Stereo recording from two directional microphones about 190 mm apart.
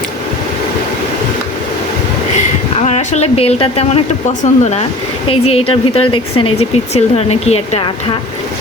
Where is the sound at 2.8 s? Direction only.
35° left (ahead or behind).